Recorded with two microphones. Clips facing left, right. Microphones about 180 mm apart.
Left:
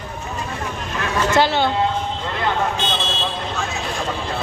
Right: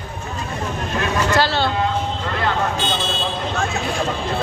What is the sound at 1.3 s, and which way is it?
Speech, 20° left (ahead or behind).